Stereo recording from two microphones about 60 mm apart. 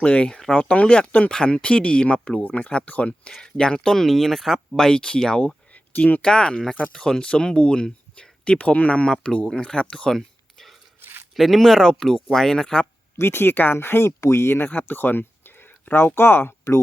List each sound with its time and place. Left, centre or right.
0.0 s speech: centre
3.3 s speech: centre
4.8 s speech: centre
5.7 s a sound: left
6.2 s speech: centre
10.2 s a sound: centre
11.0 s a sound: right
11.3 s speech: centre
13.1 s speech: left
14.7 s speech: left